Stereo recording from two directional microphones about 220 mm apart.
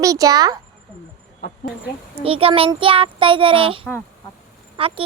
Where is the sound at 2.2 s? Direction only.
25° right (ahead or behind).